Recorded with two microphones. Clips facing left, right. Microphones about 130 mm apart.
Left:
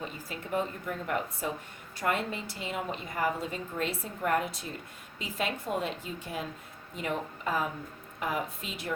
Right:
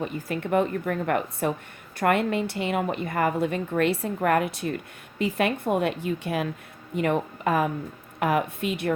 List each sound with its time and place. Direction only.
0.0 s a woman's voice: 65° right (ahead or behind)